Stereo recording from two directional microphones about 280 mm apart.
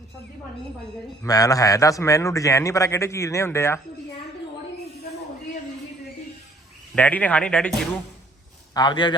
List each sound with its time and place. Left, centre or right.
1.2 s a man's voice: centre
6.9 s speech: centre
8.7 s a man's voice: centre